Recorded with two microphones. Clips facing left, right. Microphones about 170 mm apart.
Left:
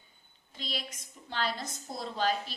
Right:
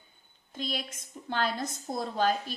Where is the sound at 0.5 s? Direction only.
50° right (ahead or behind).